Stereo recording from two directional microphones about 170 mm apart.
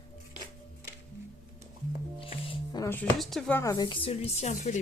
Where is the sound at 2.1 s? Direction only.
30° left (ahead or behind).